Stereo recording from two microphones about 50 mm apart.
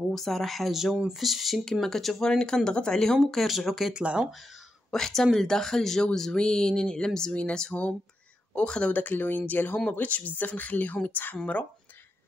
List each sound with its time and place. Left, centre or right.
0.1 s speech: centre
2.3 s speech: centre
3.3 s speech: centre
3.9 s speech: right
4.3 s speech: centre
4.9 s speech: centre
8.9 s speech: left